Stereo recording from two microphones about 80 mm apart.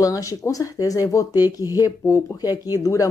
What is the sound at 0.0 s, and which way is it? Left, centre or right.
Speech, left.